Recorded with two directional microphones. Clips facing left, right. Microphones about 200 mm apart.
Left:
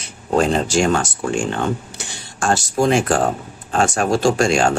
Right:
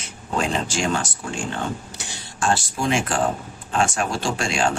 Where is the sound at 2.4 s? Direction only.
40° left (ahead or behind).